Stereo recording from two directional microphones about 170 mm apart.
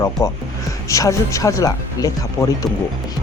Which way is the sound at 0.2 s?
20° left (ahead or behind).